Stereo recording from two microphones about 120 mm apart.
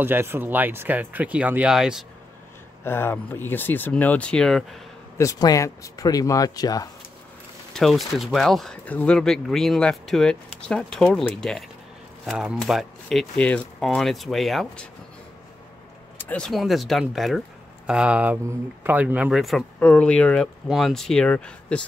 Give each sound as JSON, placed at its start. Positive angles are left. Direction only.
{"t": 0.0, "sound": "speech", "side_deg": -20}
{"t": 2.8, "sound": "speech", "side_deg": 20}
{"t": 5.1, "sound": "speech", "side_deg": 25}
{"t": 7.7, "sound": "speech", "side_deg": 0}
{"t": 16.2, "sound": "a sound", "side_deg": 15}
{"t": 16.4, "sound": "speech", "side_deg": 0}
{"t": 19.8, "sound": "speech", "side_deg": 10}